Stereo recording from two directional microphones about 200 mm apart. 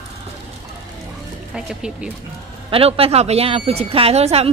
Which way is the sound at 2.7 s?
30° right (ahead or behind).